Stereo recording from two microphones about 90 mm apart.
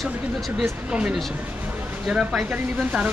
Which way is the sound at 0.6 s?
10° right (ahead or behind).